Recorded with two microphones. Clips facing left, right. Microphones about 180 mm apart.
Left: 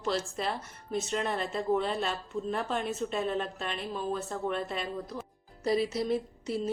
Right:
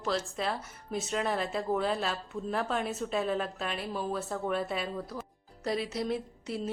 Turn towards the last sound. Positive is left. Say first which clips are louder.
# left 3 dB
turn(degrees=0)  # may be behind; listen again after turning